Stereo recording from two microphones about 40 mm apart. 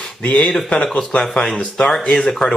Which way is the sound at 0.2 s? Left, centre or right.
Left.